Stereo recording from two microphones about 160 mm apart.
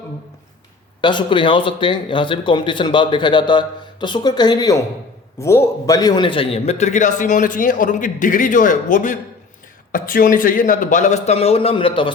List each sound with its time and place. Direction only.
1.0 s a man's voice: 30° left (ahead or behind)